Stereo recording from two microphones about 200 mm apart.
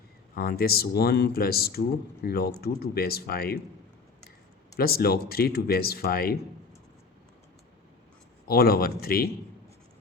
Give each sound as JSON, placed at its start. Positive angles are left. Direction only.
{"t": 0.3, "sound": "speech", "side_deg": 50}
{"t": 4.8, "sound": "speech", "side_deg": 50}
{"t": 8.4, "sound": "speech", "side_deg": 50}